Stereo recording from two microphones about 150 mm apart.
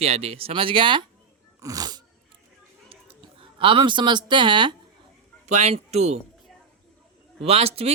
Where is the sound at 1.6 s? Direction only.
25° right (ahead or behind).